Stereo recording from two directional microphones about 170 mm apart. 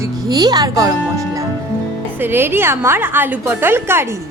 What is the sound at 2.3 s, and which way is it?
Speech, 15° right (ahead or behind).